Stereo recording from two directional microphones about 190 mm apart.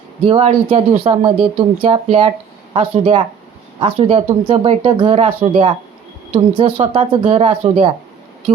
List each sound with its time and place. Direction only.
0.3 s speech: 30° right (ahead or behind)